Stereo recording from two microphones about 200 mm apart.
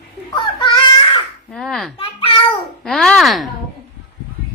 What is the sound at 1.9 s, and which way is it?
Speech, 25° left (ahead or behind).